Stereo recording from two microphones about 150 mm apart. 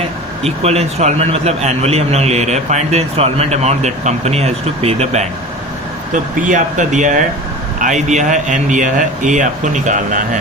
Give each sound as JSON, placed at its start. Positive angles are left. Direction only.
{"t": 0.4, "sound": "a man's voice", "side_deg": -45}
{"t": 6.4, "sound": "speech", "side_deg": -55}